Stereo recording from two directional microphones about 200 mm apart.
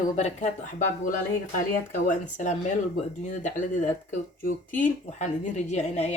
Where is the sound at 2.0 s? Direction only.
40° left (ahead or behind).